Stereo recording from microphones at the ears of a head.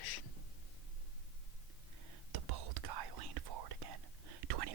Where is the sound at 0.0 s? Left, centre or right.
Left.